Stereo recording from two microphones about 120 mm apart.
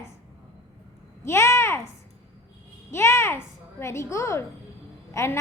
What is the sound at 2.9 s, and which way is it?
A woman's voice, 20° left (ahead or behind).